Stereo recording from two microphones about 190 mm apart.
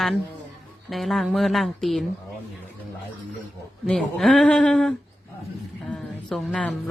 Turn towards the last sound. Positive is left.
turn(degrees=5)  # may be behind; listen again after turning